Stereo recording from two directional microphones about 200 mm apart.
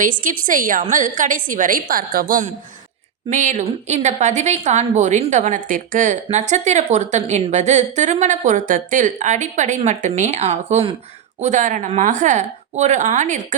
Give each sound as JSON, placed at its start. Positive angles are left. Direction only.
{"t": 0.0, "sound": "a woman's voice", "side_deg": -40}